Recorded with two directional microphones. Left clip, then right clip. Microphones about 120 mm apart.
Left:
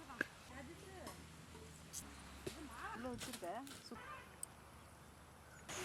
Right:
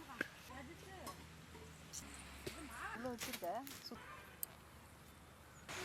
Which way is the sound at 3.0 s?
20° right (ahead or behind).